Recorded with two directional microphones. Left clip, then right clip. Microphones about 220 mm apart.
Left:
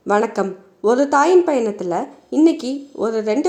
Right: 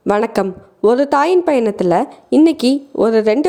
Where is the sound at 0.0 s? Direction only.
45° right (ahead or behind).